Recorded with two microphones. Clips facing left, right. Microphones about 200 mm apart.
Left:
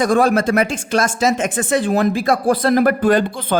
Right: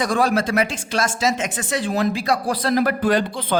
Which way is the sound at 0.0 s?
50° left (ahead or behind).